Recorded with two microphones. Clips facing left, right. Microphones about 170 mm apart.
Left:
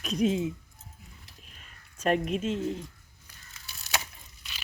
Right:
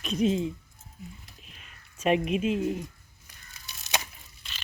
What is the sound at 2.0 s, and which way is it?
Speech, 5° right (ahead or behind).